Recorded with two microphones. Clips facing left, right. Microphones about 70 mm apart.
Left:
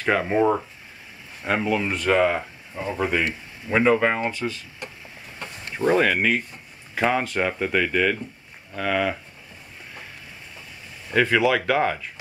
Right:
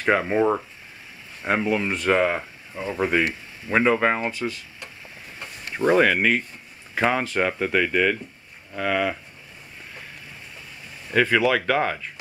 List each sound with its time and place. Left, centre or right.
0.0 s speech: centre
1.4 s speech: right
1.8 s speech: centre
5.9 s speech: centre
11.1 s speech: centre